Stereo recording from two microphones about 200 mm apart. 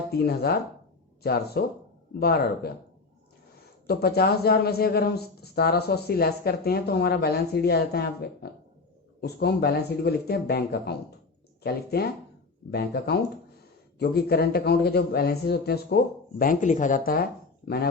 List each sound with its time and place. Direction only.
0.1 s speech: 50° left (ahead or behind)
3.8 s speech: 50° left (ahead or behind)
16.4 s speech: 40° left (ahead or behind)